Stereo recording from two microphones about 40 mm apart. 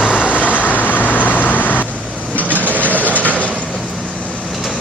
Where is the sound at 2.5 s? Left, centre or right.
Right.